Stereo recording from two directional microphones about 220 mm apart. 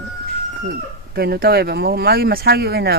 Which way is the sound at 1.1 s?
45° right (ahead or behind).